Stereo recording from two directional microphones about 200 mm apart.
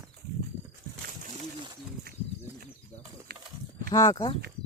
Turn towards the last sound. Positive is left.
turn(degrees=20)  # may be behind; listen again after turning